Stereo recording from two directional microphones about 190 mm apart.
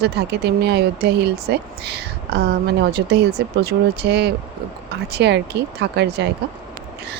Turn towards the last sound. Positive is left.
turn(degrees=-60)  # may be behind; listen again after turning